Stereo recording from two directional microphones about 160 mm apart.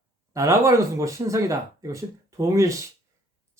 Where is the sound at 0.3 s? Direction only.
20° right (ahead or behind).